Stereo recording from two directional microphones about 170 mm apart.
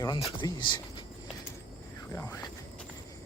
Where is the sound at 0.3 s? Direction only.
30° left (ahead or behind).